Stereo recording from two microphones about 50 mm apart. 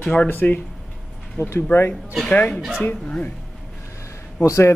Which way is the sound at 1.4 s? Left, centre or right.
Left.